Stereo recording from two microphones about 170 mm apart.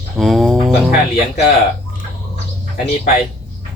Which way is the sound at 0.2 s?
Centre (ahead or behind).